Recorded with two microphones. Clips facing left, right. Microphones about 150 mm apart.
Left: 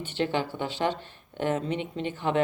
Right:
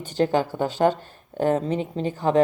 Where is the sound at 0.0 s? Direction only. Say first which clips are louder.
Right 6 dB; 40° right (ahead or behind).